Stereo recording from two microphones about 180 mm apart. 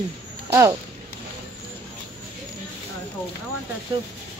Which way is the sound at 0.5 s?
15° right (ahead or behind).